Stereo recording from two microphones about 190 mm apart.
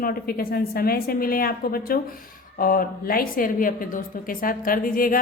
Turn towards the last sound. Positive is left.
turn(degrees=50)  # may be behind; listen again after turning